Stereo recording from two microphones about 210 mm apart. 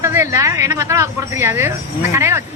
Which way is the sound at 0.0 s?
15° right (ahead or behind).